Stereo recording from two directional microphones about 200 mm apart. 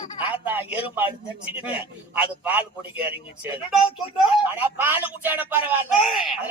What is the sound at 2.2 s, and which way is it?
Speech, 10° right (ahead or behind).